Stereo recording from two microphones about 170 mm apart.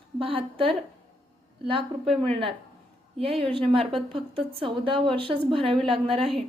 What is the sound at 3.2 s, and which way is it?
Speech, 35° right (ahead or behind).